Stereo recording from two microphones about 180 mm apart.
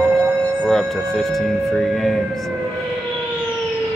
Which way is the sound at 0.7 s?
Centre (ahead or behind).